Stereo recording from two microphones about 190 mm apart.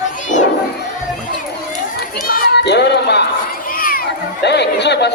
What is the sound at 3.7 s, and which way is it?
Crowd, 50° left (ahead or behind).